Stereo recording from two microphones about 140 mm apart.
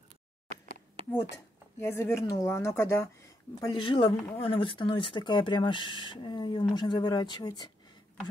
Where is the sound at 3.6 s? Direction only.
35° left (ahead or behind).